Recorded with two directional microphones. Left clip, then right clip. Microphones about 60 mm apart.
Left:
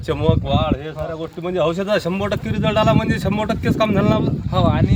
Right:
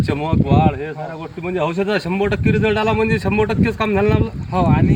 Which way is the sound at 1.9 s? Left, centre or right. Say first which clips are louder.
Right 1 dB; left.